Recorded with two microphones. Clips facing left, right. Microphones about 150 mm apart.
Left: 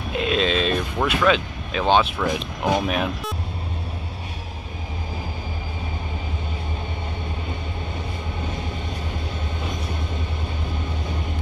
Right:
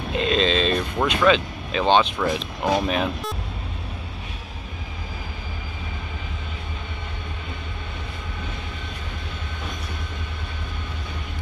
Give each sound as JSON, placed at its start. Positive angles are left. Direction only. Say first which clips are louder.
{"t": 0.1, "sound": "speech", "louder": "even", "side_deg": 5}